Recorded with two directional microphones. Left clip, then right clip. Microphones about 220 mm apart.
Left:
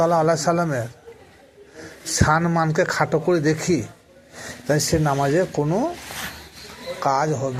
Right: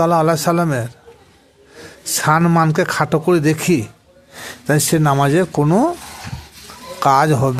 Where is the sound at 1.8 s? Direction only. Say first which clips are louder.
Right 3 dB; 30° right (ahead or behind).